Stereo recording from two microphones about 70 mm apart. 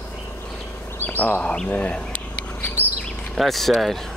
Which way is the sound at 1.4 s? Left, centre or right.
Centre.